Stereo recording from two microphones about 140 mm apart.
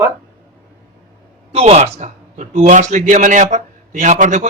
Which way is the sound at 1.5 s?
50° right (ahead or behind).